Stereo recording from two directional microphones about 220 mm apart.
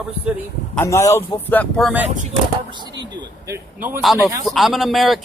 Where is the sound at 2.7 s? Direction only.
20° right (ahead or behind).